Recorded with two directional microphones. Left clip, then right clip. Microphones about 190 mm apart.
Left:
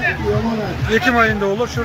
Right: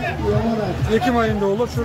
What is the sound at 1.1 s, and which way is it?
Speech, 5° right (ahead or behind).